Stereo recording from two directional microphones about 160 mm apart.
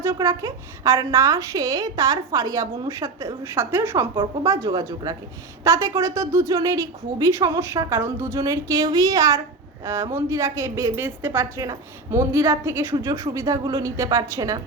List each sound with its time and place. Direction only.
0.0 s a woman's voice: 15° right (ahead or behind)